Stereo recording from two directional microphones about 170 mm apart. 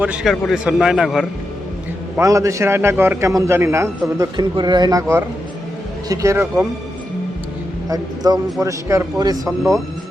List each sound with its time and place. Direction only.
0.0 s a man's voice: 5° right (ahead or behind)
2.1 s a man's voice: 20° right (ahead or behind)
7.9 s a man's voice: 20° right (ahead or behind)